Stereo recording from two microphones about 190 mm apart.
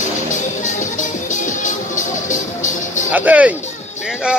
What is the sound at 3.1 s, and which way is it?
Speech, 10° right (ahead or behind).